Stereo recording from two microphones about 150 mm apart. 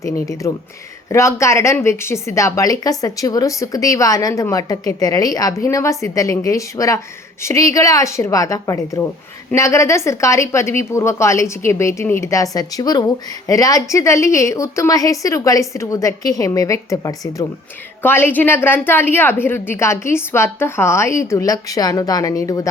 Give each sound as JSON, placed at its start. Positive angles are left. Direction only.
{"t": 0.0, "sound": "a woman's voice", "side_deg": 20}